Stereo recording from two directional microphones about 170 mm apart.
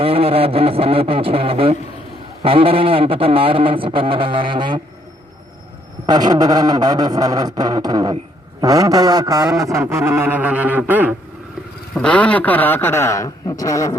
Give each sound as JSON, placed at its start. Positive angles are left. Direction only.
{"t": 0.0, "sound": "a sound", "side_deg": -35}
{"t": 6.1, "sound": "a man's voice", "side_deg": -25}
{"t": 11.9, "sound": "a man's voice", "side_deg": 5}